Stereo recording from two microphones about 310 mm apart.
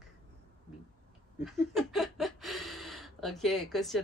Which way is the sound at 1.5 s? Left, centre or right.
Centre.